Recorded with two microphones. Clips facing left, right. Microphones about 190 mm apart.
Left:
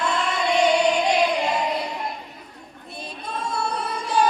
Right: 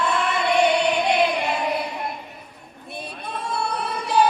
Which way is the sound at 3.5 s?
60° right (ahead or behind).